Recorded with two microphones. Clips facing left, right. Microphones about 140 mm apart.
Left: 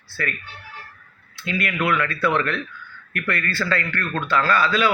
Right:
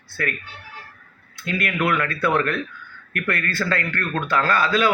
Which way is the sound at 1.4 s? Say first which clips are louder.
Even; 50° right (ahead or behind).